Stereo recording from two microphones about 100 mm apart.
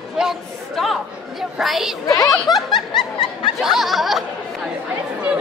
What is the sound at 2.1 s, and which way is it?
Speech, 35° left (ahead or behind).